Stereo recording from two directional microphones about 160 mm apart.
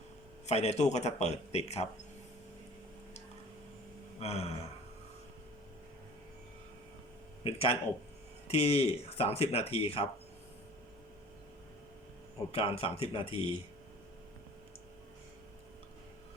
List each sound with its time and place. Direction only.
0.4 s a man's voice: 45° left (ahead or behind)
4.2 s speech: 40° left (ahead or behind)
7.4 s speech: 35° left (ahead or behind)
12.5 s speech: 35° left (ahead or behind)